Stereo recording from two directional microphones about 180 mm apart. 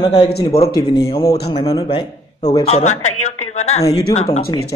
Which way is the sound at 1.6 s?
30° left (ahead or behind).